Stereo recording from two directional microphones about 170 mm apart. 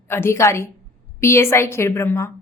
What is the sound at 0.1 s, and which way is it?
A woman's voice, 15° left (ahead or behind).